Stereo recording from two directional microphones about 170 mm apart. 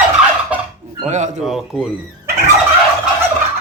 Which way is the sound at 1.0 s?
45° right (ahead or behind).